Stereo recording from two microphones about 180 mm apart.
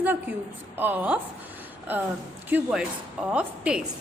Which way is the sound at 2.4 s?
5° right (ahead or behind).